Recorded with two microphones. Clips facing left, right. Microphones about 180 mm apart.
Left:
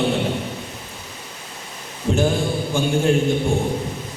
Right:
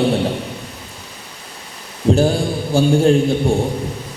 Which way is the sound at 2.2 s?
35° right (ahead or behind).